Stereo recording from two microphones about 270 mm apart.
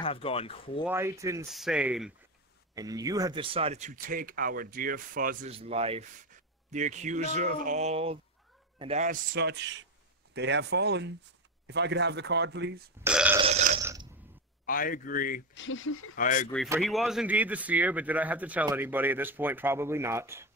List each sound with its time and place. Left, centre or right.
0.0 s speech: left
0.8 s speech: centre; by 9.2 s right
9.3 s speech: right
13.0 s speech: centre
13.4 s burping: right
14.7 s a man's voice: left
15.5 s speech: left
16.2 s speech: left
16.8 s speech: centre